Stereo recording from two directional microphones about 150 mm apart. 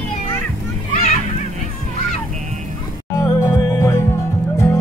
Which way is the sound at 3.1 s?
20° left (ahead or behind).